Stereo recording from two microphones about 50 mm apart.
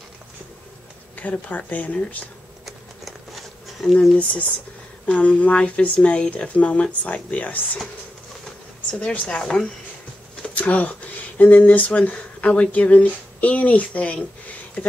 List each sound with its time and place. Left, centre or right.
1.1 s speech: left
2.6 s a sound: centre
3.8 s speech: centre
5.0 s speech: left
9.1 s speech: left
9.4 s speech: centre
10.5 s speech: left